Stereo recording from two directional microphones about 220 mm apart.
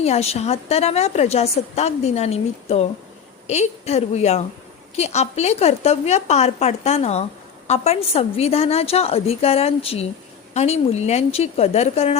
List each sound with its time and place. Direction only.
0.0 s a woman's voice: 30° left (ahead or behind)